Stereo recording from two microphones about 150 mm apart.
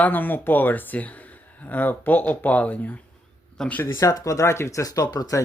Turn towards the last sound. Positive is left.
turn(degrees=25)  # may be behind; listen again after turning